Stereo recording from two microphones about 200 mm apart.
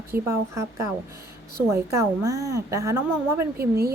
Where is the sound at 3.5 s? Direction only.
50° right (ahead or behind).